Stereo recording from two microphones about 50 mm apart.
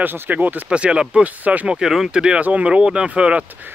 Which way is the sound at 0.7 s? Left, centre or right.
Right.